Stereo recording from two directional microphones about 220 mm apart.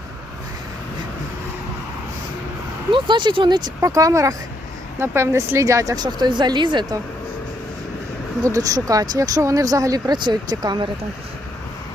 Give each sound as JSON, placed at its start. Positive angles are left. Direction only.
{"t": 2.9, "sound": "speech", "side_deg": -20}
{"t": 8.4, "sound": "speech", "side_deg": -15}